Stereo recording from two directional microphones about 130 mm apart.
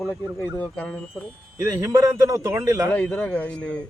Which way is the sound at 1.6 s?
25° right (ahead or behind).